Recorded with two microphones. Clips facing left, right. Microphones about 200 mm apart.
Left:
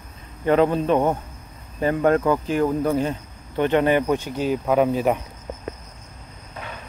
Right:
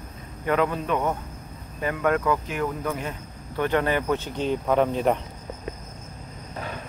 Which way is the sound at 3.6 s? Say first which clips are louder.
Left 5 dB; 20° left (ahead or behind).